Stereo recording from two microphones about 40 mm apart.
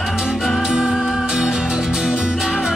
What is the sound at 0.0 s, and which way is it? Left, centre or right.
Music, centre.